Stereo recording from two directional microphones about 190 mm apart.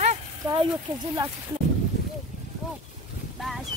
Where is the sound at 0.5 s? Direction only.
20° right (ahead or behind).